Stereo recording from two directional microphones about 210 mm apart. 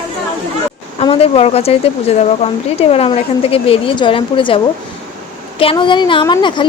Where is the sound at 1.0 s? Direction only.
25° left (ahead or behind).